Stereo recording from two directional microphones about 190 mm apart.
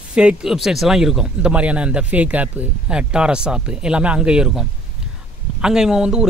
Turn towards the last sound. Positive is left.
turn(degrees=-5)  # may be behind; listen again after turning